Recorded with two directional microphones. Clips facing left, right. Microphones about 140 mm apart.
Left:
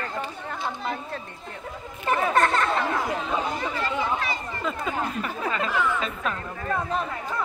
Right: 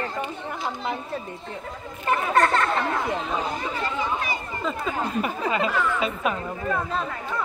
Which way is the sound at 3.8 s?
20° right (ahead or behind).